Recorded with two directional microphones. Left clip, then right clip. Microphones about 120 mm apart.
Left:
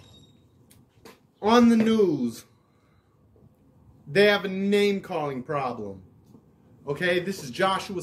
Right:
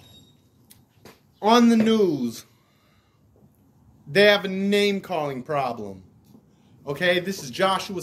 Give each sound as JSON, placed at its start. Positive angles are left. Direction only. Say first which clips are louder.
{"t": 1.4, "sound": "speech", "louder": "right 2 dB", "side_deg": 15}
{"t": 4.1, "sound": "speech", "louder": "right 3 dB", "side_deg": 10}